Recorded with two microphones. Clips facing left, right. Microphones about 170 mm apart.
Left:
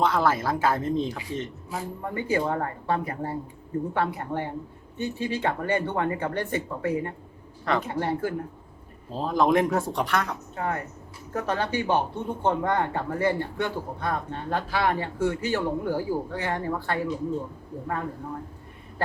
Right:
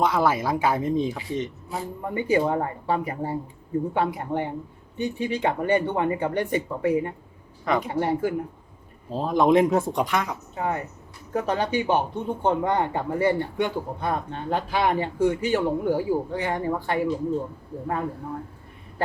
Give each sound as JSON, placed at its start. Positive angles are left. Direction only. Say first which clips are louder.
{"t": 0.0, "sound": "speech", "louder": "right 1 dB", "side_deg": -10}
{"t": 1.1, "sound": "speech", "louder": "right 3 dB", "side_deg": -5}
{"t": 9.1, "sound": "speech", "louder": "right 3 dB", "side_deg": 0}
{"t": 9.4, "sound": "speech", "louder": "right 3 dB", "side_deg": -20}